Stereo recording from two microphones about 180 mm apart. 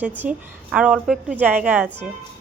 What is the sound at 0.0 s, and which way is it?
A woman's voice, 10° right (ahead or behind).